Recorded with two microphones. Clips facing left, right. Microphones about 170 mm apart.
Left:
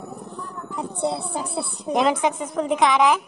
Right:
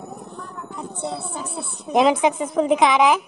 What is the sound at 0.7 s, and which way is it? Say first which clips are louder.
Speech: left 4 dB; 35° left (ahead or behind).